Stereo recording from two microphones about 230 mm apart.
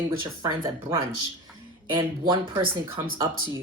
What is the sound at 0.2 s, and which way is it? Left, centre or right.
Speech, centre.